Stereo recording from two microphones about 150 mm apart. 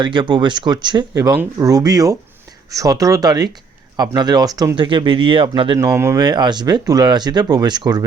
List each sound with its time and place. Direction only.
0.0 s speech: 30° right (ahead or behind)
5.8 s speech: 20° right (ahead or behind)